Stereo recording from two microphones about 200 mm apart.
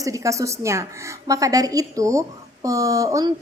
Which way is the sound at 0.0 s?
15° right (ahead or behind).